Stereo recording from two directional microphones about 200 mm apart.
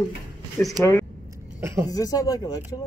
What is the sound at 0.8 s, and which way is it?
Speech, 10° left (ahead or behind).